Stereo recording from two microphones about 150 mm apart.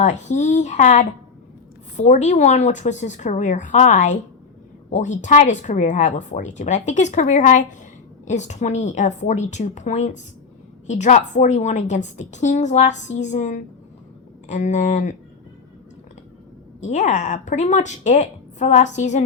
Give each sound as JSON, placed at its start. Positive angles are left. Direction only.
{"t": 0.0, "sound": "speech", "side_deg": 50}
{"t": 16.8, "sound": "speech", "side_deg": 55}